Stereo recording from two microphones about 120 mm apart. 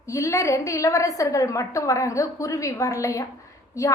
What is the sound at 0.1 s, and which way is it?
A woman's voice, 25° left (ahead or behind).